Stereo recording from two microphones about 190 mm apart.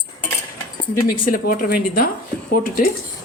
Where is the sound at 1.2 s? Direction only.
45° left (ahead or behind).